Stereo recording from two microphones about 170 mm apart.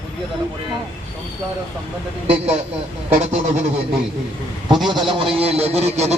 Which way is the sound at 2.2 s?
35° right (ahead or behind).